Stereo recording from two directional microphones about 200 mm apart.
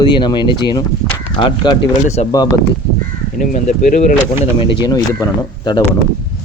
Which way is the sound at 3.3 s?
40° left (ahead or behind).